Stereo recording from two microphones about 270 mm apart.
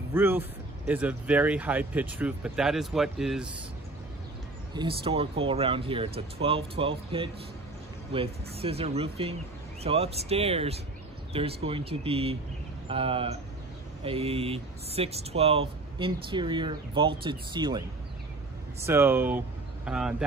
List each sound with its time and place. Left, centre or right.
0.1 s speech: centre
4.7 s speech: centre